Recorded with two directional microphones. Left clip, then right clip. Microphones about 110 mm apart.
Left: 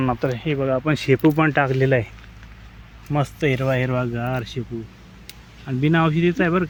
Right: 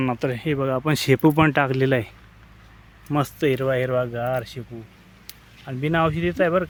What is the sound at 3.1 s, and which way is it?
Speech, 80° right.